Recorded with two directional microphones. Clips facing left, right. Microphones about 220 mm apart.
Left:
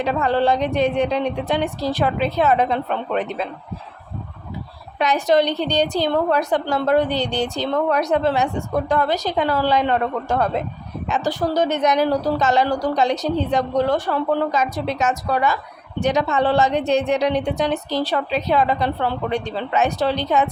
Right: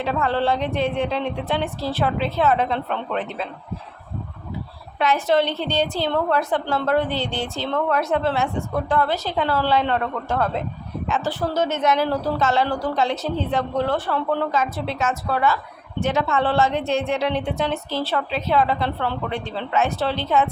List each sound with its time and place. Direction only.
0.0 s a woman's voice: 15° left (ahead or behind)
4.9 s a woman's voice: 15° left (ahead or behind)